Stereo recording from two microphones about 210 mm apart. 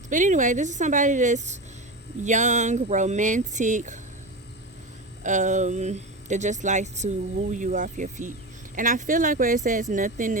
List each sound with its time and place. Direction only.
0.1 s speech: 35° right (ahead or behind)
5.2 s speech: 35° right (ahead or behind)